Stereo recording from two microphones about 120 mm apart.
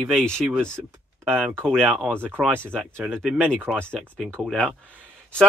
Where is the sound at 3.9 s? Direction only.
5° left (ahead or behind).